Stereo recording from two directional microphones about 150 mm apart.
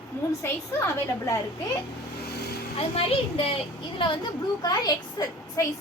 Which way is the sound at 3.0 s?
40° left (ahead or behind).